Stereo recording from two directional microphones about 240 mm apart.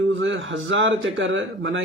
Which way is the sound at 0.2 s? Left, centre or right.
Right.